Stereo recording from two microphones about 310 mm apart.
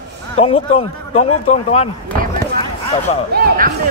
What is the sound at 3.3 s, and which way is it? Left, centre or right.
Speech, right.